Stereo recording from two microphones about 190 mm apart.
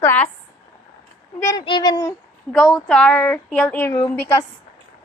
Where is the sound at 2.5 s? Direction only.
Centre (ahead or behind).